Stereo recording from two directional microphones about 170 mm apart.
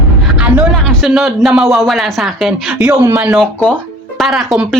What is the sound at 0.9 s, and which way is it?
A woman's voice, centre (ahead or behind).